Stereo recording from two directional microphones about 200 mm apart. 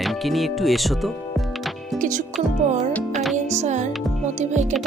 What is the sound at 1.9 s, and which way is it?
Music, 40° right (ahead or behind).